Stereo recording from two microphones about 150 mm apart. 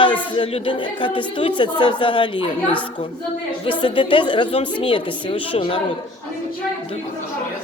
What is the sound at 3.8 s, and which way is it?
A woman's voice, 35° left (ahead or behind).